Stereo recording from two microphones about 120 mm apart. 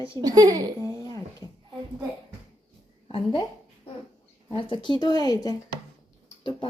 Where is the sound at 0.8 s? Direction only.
30° left (ahead or behind).